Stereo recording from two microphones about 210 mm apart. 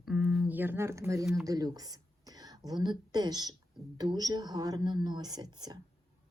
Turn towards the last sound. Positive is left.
turn(degrees=-20)  # may be behind; listen again after turning